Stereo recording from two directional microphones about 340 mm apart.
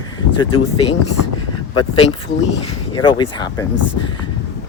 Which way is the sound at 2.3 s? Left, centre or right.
Left.